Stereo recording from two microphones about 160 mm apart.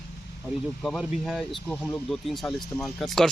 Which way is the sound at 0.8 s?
Centre (ahead or behind).